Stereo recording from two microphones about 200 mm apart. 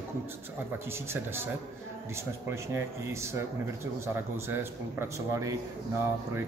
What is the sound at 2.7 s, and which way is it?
Speech, 15° right (ahead or behind).